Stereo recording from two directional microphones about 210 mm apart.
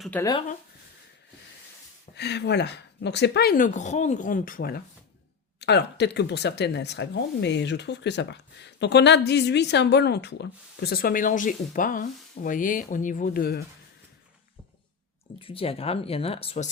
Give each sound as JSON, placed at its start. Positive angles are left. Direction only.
{"t": 0.0, "sound": "speech", "side_deg": 5}
{"t": 2.1, "sound": "speech", "side_deg": 50}
{"t": 15.4, "sound": "speech", "side_deg": 25}